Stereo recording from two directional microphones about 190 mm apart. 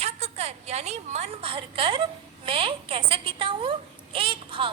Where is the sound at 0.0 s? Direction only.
35° right (ahead or behind).